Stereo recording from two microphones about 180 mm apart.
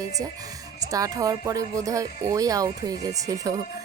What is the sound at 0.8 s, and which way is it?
Speech, 20° right (ahead or behind).